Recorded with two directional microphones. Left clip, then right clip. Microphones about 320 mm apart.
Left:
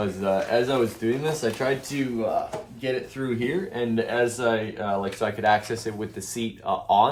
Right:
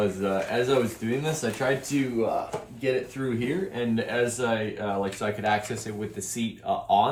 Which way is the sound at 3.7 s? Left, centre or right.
Centre.